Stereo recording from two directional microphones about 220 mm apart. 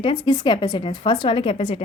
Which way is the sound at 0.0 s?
20° left (ahead or behind).